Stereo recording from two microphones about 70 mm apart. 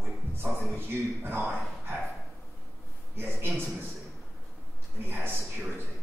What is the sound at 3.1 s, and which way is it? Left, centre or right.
Speech, right.